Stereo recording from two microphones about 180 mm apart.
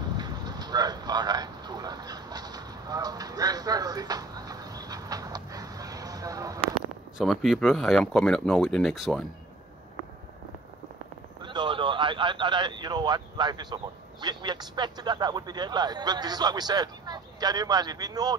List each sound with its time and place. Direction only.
0.2 s a sound: 20° right (ahead or behind)
7.2 s speech: centre (ahead or behind)
11.4 s speech: 25° right (ahead or behind)